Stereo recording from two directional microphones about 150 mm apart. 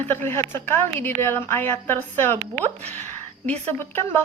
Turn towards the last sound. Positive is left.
turn(degrees=15)  # may be behind; listen again after turning